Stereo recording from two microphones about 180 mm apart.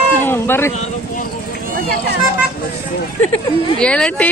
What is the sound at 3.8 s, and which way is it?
Speech, 5° left (ahead or behind).